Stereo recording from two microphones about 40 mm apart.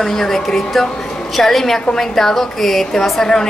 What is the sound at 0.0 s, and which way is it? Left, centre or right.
A woman's voice, centre.